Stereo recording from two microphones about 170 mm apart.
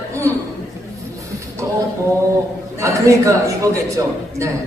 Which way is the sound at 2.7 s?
15° right (ahead or behind).